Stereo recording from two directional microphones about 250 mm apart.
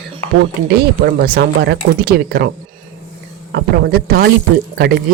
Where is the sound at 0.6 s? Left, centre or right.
Right.